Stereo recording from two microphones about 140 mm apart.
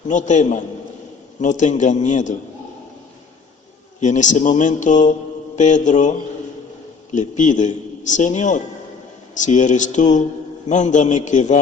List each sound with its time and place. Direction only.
0.1 s a man's voice: 60° left (ahead or behind)
4.0 s a man's voice: 60° left (ahead or behind)